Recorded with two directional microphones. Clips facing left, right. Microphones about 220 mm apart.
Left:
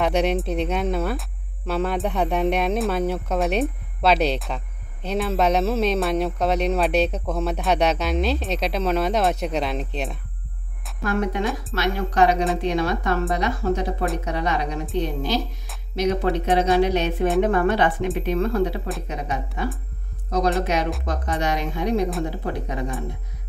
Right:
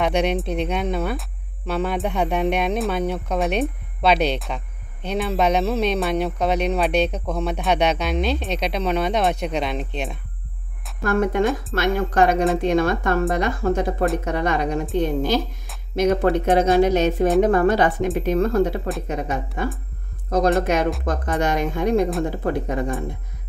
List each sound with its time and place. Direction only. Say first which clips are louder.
0.0 s speech: even; centre (ahead or behind)
11.0 s a woman's voice: right 4 dB; 50° right (ahead or behind)